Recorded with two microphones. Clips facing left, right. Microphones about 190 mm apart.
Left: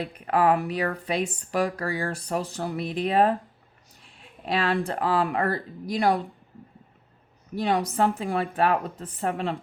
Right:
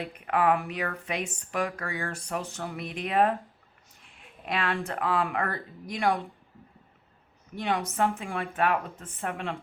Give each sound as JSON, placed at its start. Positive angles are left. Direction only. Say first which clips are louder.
{"t": 0.0, "sound": "speech", "louder": "left 3 dB", "side_deg": 35}
{"t": 7.5, "sound": "speech", "louder": "left 5 dB", "side_deg": 35}